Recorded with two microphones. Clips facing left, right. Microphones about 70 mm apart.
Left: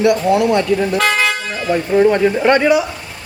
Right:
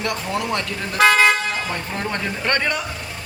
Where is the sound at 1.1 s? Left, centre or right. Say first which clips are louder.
Right 1 dB; right.